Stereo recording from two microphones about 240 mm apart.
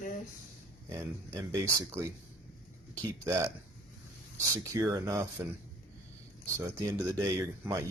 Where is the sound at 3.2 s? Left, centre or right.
Centre.